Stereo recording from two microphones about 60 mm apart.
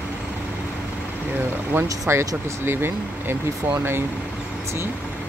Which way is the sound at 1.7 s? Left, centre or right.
Right.